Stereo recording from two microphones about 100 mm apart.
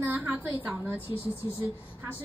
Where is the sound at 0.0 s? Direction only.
15° right (ahead or behind).